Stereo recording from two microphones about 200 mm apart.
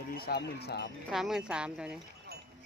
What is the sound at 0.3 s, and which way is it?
Speech, 55° left (ahead or behind).